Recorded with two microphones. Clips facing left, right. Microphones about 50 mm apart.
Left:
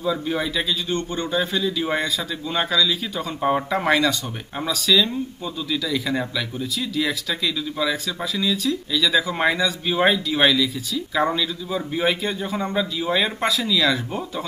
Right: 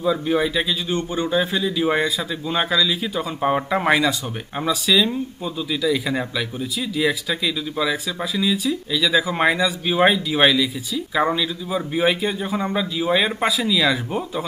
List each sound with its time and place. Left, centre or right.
0.0 s speech: centre